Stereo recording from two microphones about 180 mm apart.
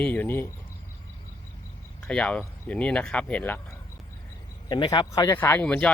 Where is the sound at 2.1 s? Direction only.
5° left (ahead or behind).